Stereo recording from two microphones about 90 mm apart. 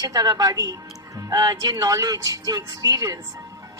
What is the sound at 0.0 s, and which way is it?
A woman's voice, 45° right (ahead or behind).